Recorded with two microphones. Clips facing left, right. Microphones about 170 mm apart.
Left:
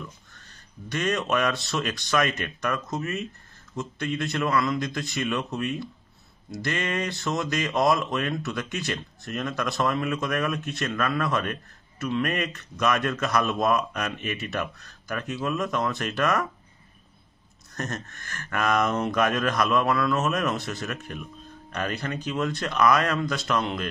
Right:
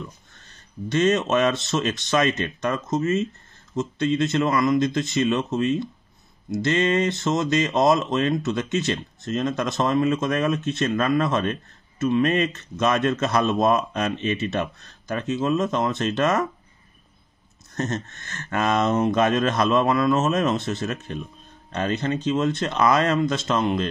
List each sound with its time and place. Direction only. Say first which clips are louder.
0.8 s speech: right 6 dB; 25° right (ahead or behind)
17.7 s speech: right 6 dB; 25° right (ahead or behind)